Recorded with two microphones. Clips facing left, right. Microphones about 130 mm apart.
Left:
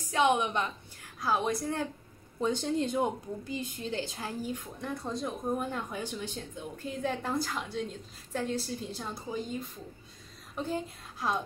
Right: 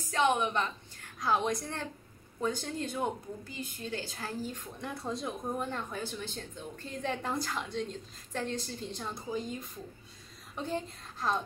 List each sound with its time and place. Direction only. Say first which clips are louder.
0.1 s a woman's voice: left 2 dB; 15° left (ahead or behind)
1.0 s a woman's voice: even; 5° left (ahead or behind)
2.4 s a woman's voice: left 5 dB; 20° left (ahead or behind)
4.8 s a woman's voice: left 2 dB; centre (ahead or behind)
5.6 s a woman's voice: left 1 dB; 10° left (ahead or behind)